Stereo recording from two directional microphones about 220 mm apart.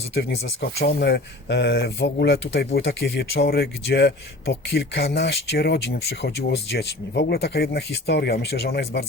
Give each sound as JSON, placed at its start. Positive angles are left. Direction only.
{"t": 0.1, "sound": "speech", "side_deg": 50}